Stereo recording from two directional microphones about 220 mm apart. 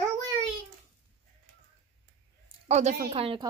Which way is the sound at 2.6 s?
30° right (ahead or behind).